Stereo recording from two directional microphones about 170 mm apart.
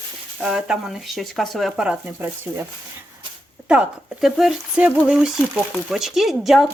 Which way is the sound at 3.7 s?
5° right (ahead or behind).